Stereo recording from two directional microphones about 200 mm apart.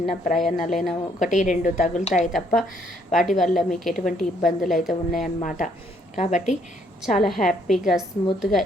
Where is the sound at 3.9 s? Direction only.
40° left (ahead or behind).